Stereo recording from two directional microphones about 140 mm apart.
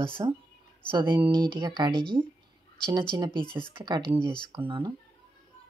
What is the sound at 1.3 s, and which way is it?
Speech, 30° right (ahead or behind).